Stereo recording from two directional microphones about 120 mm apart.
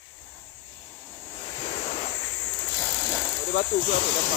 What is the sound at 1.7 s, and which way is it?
Vehicle, 70° left (ahead or behind).